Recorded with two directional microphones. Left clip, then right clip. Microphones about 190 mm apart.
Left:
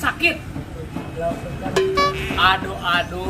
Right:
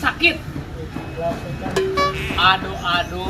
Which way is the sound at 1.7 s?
Centre (ahead or behind).